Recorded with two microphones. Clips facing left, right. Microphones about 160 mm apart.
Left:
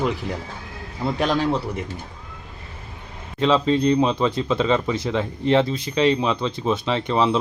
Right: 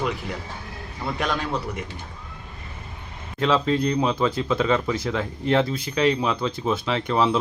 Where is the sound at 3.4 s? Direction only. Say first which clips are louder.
Left 3 dB; centre (ahead or behind).